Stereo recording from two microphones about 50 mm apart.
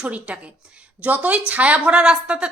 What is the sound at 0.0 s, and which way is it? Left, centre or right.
A woman's voice, right.